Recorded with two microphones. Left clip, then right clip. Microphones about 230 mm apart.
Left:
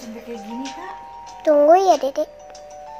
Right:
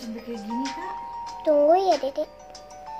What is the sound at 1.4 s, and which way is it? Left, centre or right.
Speech, centre.